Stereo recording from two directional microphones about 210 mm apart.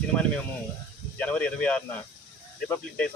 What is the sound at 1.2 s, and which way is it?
Speech, 5° left (ahead or behind).